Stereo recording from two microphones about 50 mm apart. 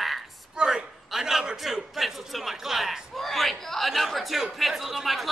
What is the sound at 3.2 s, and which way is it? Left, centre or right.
Chatter, centre.